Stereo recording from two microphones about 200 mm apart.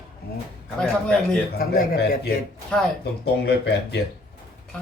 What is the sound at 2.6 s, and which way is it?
Speech, centre (ahead or behind).